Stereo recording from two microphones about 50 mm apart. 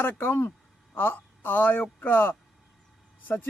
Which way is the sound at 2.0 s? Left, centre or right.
Left.